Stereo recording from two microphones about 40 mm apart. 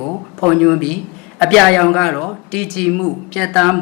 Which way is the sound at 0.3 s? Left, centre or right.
Centre.